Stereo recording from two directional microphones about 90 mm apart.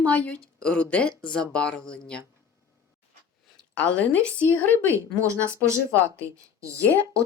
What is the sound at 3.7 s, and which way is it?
Speech, 15° left (ahead or behind).